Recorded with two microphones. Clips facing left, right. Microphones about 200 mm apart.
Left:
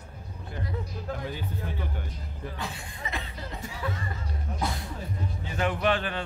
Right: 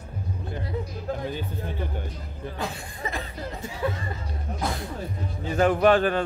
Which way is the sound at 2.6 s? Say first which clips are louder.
Right 8 dB; 45° right (ahead or behind).